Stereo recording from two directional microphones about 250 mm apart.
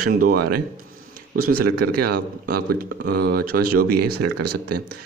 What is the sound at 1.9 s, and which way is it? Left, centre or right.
Speech, right.